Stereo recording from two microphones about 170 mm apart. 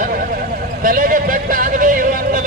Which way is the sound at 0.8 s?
55° right (ahead or behind).